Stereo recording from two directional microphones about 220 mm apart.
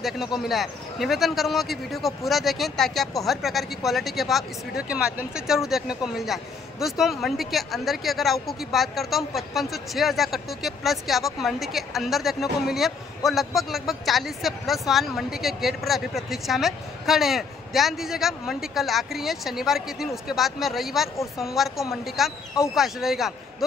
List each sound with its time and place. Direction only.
0.0 s speech: centre (ahead or behind)